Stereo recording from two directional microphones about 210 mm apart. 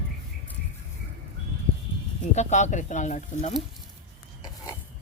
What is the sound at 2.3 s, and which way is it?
Speech, 35° left (ahead or behind).